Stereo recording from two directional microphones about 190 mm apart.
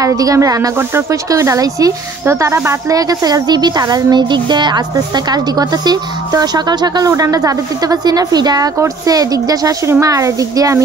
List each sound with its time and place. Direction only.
0.0 s speech: 20° right (ahead or behind)